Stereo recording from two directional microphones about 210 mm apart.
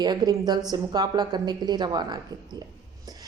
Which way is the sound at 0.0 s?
20° right (ahead or behind).